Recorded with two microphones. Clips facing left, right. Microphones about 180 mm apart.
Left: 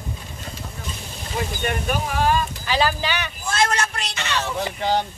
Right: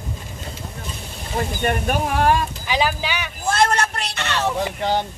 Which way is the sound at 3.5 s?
60° right (ahead or behind).